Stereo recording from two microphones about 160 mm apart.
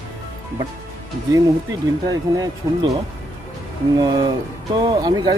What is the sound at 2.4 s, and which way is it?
Speech, 25° right (ahead or behind).